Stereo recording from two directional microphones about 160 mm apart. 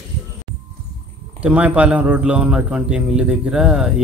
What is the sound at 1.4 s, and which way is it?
A man's voice, 10° right (ahead or behind).